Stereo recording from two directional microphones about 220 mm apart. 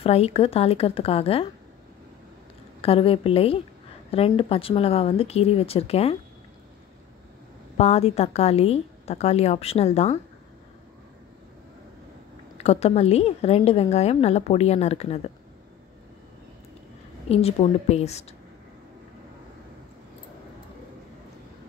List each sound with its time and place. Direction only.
0.0 s a woman's voice: 25° left (ahead or behind)
2.8 s a woman's voice: 25° left (ahead or behind)
7.7 s a woman's voice: 30° left (ahead or behind)
12.5 s a woman's voice: 30° left (ahead or behind)
17.3 s a woman's voice: 25° left (ahead or behind)